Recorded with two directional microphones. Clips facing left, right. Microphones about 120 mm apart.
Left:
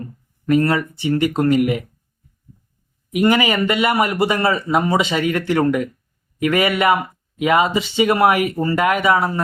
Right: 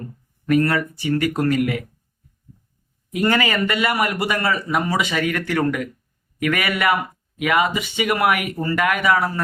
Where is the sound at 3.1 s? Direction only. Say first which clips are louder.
Left 4 dB; 15° left (ahead or behind).